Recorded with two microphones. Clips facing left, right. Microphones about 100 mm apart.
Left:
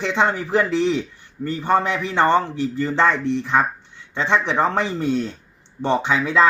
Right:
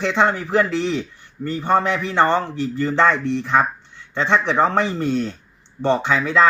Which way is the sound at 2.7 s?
5° left (ahead or behind).